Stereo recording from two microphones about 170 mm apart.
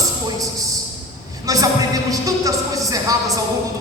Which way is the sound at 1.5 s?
20° right (ahead or behind).